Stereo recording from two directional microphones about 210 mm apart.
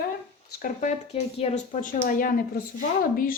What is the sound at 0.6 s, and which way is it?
A woman's voice, 35° left (ahead or behind).